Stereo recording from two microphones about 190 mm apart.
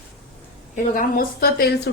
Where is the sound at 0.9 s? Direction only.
50° left (ahead or behind).